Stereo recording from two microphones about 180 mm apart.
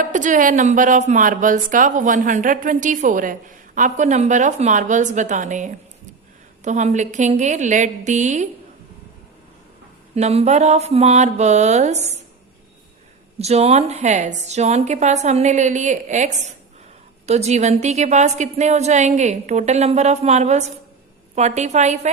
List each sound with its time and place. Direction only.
0.0 s a woman's voice: 45° right (ahead or behind)
10.2 s a woman's voice: 40° right (ahead or behind)
13.4 s a woman's voice: 35° right (ahead or behind)